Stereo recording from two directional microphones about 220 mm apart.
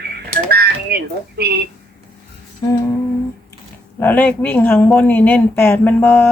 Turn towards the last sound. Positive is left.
turn(degrees=5)  # may be behind; listen again after turning